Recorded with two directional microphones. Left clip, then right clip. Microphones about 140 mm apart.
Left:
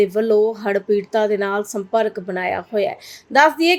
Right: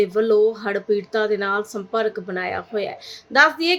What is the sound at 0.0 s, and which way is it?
A woman's voice, 30° left (ahead or behind).